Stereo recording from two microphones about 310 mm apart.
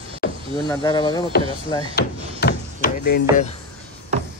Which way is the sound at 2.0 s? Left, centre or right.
Left.